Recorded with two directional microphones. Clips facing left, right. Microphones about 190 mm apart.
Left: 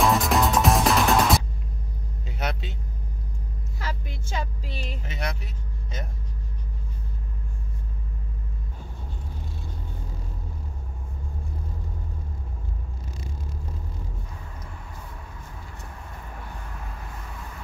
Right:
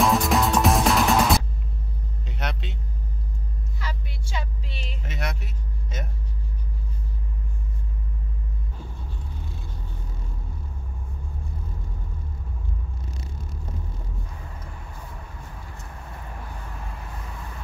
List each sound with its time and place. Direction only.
0.0 s music: centre (ahead or behind)
2.2 s vehicle: centre (ahead or behind)
3.8 s vehicle: 45° left (ahead or behind)
5.0 s vehicle: centre (ahead or behind)